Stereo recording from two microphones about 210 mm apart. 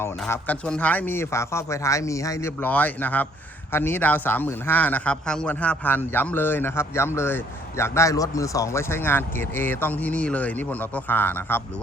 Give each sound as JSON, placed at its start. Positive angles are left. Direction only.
{"t": 0.0, "sound": "a man's voice", "side_deg": 10}